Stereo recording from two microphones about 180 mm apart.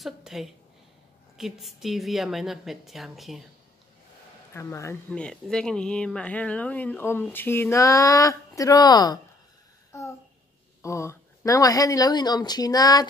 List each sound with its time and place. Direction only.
0.0 s a woman's voice: centre (ahead or behind)
4.6 s speech: 15° left (ahead or behind)
5.2 s speech: 5° left (ahead or behind); by 9.2 s 20° left (ahead or behind)
9.9 s a sound: 15° left (ahead or behind)
10.8 s speech: 15° left (ahead or behind)